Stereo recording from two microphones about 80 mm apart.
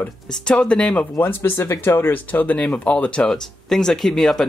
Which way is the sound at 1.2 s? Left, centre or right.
Left.